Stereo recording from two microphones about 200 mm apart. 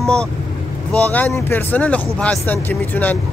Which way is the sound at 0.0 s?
5° left (ahead or behind).